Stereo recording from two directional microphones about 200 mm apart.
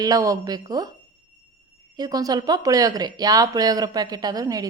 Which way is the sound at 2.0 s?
20° right (ahead or behind).